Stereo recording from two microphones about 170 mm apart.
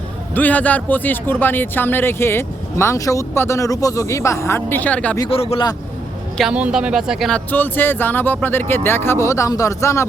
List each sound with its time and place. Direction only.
0.3 s speech: 10° left (ahead or behind)
5.3 s speech: 35° left (ahead or behind)
6.3 s speech: 5° right (ahead or behind); by 10.1 s 15° left (ahead or behind)